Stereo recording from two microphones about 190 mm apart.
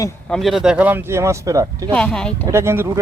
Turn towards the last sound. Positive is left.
turn(degrees=-15)  # may be behind; listen again after turning